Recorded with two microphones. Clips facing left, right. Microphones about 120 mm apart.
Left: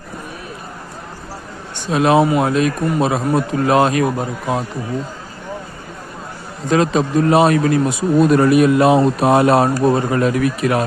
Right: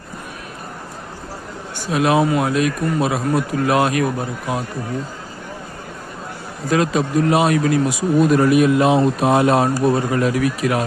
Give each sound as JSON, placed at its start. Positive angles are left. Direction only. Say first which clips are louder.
{"t": 1.9, "sound": "a man's voice", "louder": "left 3 dB", "side_deg": 35}
{"t": 6.7, "sound": "a man's voice", "louder": "left 2 dB", "side_deg": 30}
{"t": 8.4, "sound": "a man's voice", "louder": "left 2 dB", "side_deg": 55}